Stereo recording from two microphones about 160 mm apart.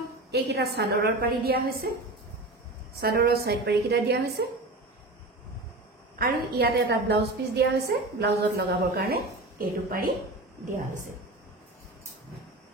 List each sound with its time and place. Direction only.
0.3 s a woman's voice: 85° right; by 1.9 s 70° right (ahead or behind)
3.0 s a woman's voice: 75° right (ahead or behind)
6.1 s a woman's voice: 75° right (ahead or behind)